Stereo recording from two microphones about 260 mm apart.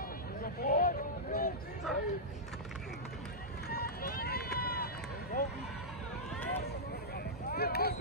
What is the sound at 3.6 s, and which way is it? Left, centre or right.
Run, left.